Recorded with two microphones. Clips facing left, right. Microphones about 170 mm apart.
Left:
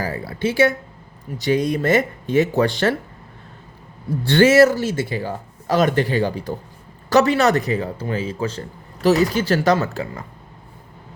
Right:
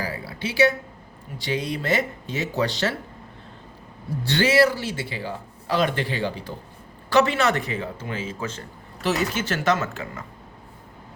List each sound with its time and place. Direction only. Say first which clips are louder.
0.0 s speech: left 7 dB; 50° left (ahead or behind)
4.2 s a man's voice: left 7 dB; 55° left (ahead or behind); by 10.2 s 35° left (ahead or behind)